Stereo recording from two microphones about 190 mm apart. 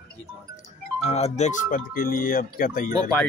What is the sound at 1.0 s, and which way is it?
Speech, 35° left (ahead or behind).